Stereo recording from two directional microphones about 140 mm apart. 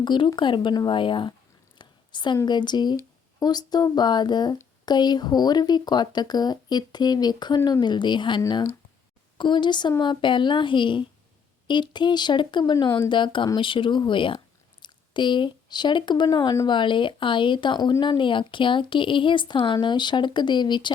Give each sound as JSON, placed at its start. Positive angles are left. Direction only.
{"t": 0.0, "sound": "speech", "side_deg": 35}